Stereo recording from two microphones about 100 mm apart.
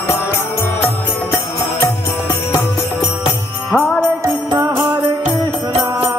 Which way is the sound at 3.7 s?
15° left (ahead or behind).